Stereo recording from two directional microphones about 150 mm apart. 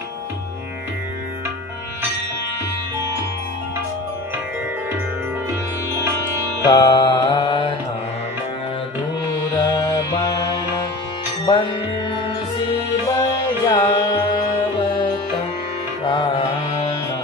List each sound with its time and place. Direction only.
6.6 s music: 25° left (ahead or behind)
9.5 s music: 30° left (ahead or behind)
11.4 s music: 30° left (ahead or behind)
13.3 s music: 30° left (ahead or behind)
16.1 s music: 30° left (ahead or behind)